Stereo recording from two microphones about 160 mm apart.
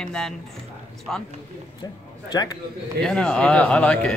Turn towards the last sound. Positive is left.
turn(degrees=5)  # may be behind; listen again after turning